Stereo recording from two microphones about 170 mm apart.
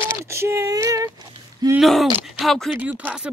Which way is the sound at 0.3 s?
15° right (ahead or behind).